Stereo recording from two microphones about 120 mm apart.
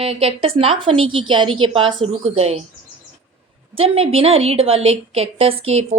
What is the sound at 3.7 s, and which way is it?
A woman's voice, 50° right (ahead or behind).